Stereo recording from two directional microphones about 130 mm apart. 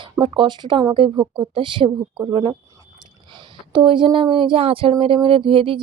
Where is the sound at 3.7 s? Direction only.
40° right (ahead or behind).